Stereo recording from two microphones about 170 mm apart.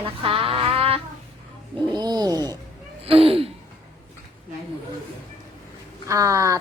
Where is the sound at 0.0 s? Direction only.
30° right (ahead or behind).